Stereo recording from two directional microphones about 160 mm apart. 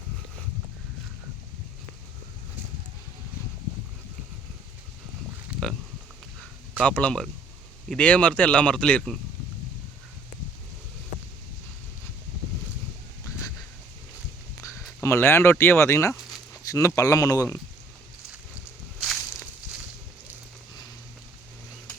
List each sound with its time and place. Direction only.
5.5 s pig: 5° right (ahead or behind)
6.8 s speech: 10° left (ahead or behind)
14.6 s speech: 15° left (ahead or behind)
18.3 s a sound: 5° right (ahead or behind)